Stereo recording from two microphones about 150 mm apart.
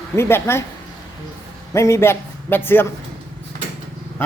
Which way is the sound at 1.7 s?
20° left (ahead or behind).